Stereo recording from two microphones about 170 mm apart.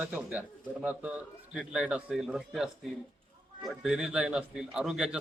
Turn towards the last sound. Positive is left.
turn(degrees=-5)  # may be behind; listen again after turning